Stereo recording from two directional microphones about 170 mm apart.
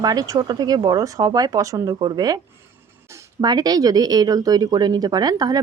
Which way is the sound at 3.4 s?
25° right (ahead or behind).